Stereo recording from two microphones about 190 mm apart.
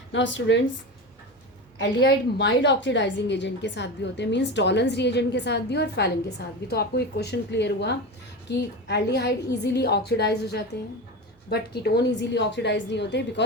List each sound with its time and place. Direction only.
0.1 s speech: 75° left (ahead or behind)
1.8 s a woman's voice: 60° left (ahead or behind)